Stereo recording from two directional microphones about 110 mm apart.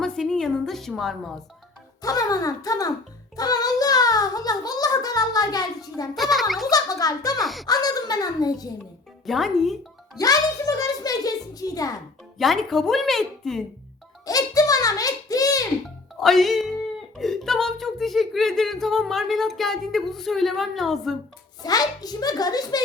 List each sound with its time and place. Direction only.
0.0 s a woman's voice: 5° left (ahead or behind)
2.0 s a child's voice: 35° left (ahead or behind)
6.1 s speech: centre (ahead or behind)
6.7 s a child's voice: 35° left (ahead or behind)
7.4 s speech: centre (ahead or behind)
7.7 s a child's voice: 35° left (ahead or behind)
9.2 s speech: centre (ahead or behind)
10.2 s a child's voice: 35° left (ahead or behind)
12.4 s speech: centre (ahead or behind)
14.3 s a sound: 35° left (ahead or behind)
16.2 s speech: centre (ahead or behind)
21.6 s a child's voice: 35° left (ahead or behind)